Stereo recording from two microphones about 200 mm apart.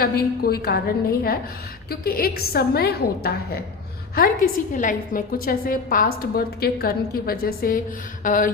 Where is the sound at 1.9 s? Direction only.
50° left (ahead or behind).